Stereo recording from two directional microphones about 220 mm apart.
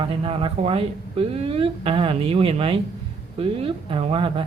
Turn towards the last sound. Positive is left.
turn(degrees=-25)  # may be behind; listen again after turning